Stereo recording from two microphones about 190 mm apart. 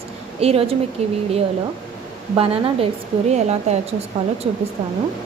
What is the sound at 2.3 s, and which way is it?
A woman's voice, 30° right (ahead or behind).